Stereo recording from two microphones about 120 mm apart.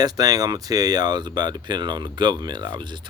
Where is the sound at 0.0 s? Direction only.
35° right (ahead or behind).